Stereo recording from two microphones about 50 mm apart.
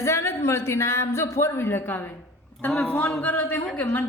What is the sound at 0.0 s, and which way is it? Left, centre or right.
A man's voice, left.